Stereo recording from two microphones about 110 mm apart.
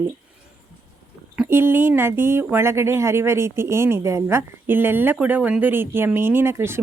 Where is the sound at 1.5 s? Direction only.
20° right (ahead or behind).